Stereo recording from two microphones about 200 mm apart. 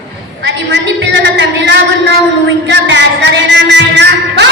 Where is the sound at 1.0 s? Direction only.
60° right (ahead or behind).